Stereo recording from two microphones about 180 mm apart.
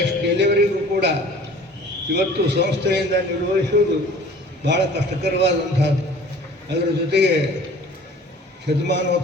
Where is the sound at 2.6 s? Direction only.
70° right (ahead or behind).